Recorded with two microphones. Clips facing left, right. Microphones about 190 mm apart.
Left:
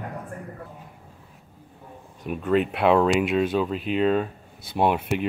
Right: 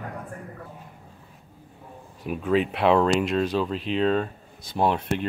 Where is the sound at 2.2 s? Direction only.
Centre (ahead or behind).